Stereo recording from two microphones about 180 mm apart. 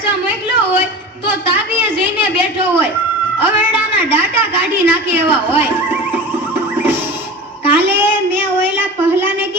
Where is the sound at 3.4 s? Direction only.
10° right (ahead or behind).